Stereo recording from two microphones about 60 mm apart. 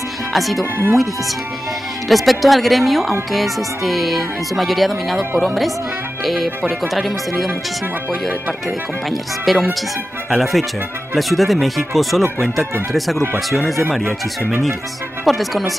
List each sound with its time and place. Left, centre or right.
0.3 s speech: centre
2.0 s speech: centre
8.1 s speech: centre
8.6 s speech: centre
14.0 s speech: right
15.2 s speech: centre